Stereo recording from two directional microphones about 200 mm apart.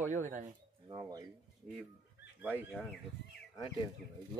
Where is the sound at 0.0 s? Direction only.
40° right (ahead or behind).